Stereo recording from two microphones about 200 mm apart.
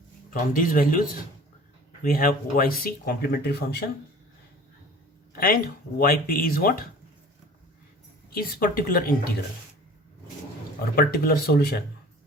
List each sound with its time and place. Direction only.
0.3 s speech: 45° left (ahead or behind)
5.3 s speech: 45° left (ahead or behind)
8.4 s speech: 45° left (ahead or behind)
10.9 s speech: 50° left (ahead or behind)